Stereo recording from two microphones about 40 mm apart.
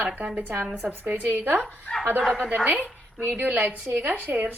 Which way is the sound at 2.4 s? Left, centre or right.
Right.